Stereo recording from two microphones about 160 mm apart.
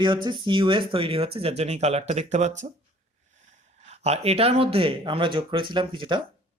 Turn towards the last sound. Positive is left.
turn(degrees=-30)  # may be behind; listen again after turning